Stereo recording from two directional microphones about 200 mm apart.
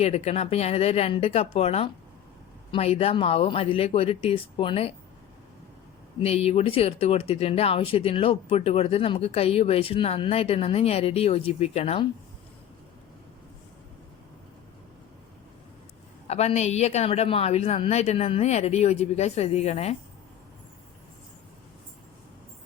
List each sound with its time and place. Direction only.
0.0 s a woman's voice: 30° left (ahead or behind)
6.2 s speech: 30° left (ahead or behind)
16.2 s a woman's voice: 30° left (ahead or behind)